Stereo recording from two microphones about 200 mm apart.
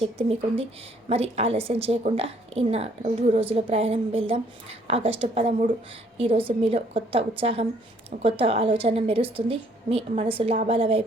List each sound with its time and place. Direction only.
0.0 s a woman's voice: 30° right (ahead or behind)